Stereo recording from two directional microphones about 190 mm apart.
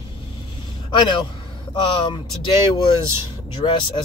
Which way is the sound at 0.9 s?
25° left (ahead or behind).